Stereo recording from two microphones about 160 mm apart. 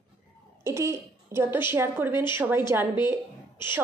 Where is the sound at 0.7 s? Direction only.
15° right (ahead or behind).